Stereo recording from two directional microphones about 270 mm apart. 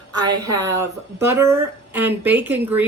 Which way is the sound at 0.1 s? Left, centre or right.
Centre.